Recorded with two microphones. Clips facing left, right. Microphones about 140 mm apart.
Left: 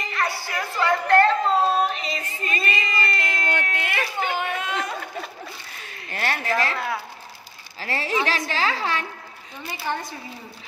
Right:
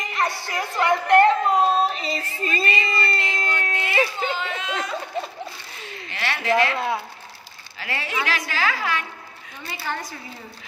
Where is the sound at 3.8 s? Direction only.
55° left (ahead or behind).